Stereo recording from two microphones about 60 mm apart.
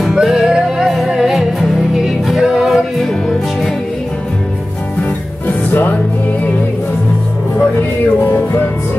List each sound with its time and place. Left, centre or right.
0.0 s music: centre
3.0 s music: centre
5.7 s music: left